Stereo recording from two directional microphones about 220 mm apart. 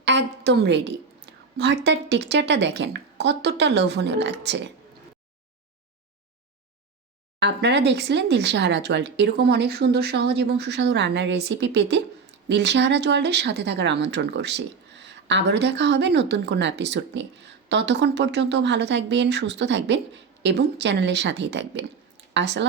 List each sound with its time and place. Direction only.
0.0 s a woman's voice: 55° right (ahead or behind)
7.3 s speech: 50° right (ahead or behind)